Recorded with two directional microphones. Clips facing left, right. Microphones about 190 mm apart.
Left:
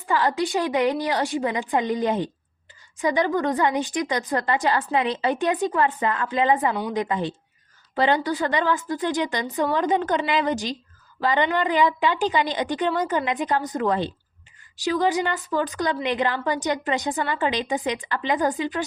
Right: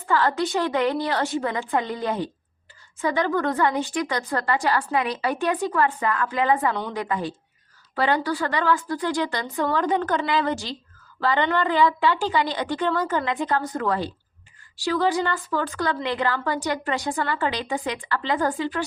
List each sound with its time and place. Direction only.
0.0 s a woman's voice: 15° left (ahead or behind)